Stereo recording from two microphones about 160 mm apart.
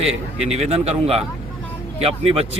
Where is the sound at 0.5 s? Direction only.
40° right (ahead or behind).